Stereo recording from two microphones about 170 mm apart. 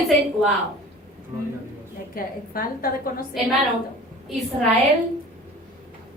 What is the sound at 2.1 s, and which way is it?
A woman's voice, 60° left (ahead or behind).